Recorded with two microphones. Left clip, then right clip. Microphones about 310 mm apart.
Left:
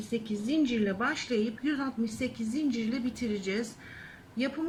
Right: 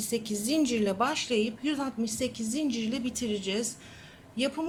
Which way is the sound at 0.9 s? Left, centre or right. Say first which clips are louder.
Right 3 dB; centre.